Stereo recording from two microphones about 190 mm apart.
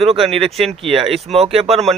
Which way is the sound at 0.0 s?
30° right (ahead or behind).